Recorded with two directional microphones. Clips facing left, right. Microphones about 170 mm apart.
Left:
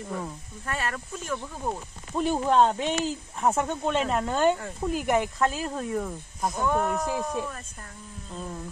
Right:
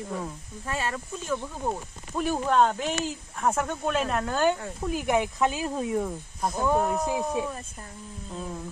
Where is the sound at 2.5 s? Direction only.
30° left (ahead or behind).